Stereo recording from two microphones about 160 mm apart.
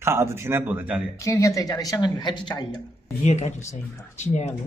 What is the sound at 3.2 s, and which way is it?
Speech, 45° left (ahead or behind).